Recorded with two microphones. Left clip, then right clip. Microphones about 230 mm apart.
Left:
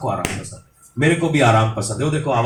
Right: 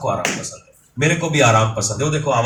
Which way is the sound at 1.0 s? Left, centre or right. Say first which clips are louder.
Even; right.